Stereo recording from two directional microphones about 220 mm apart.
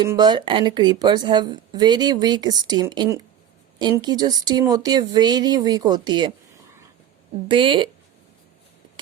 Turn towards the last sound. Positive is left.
turn(degrees=-20)  # may be behind; listen again after turning